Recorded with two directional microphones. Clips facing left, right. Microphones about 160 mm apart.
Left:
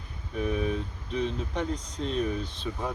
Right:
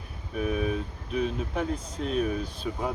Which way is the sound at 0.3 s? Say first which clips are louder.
Right 1 dB; 10° right (ahead or behind).